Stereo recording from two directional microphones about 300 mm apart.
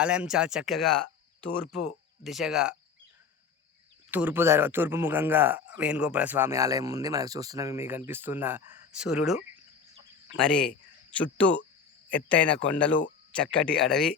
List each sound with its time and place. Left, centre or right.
0.0 s speech: centre
2.2 s speech: centre
4.1 s a man's voice: centre
12.9 s speech: left
13.3 s speech: centre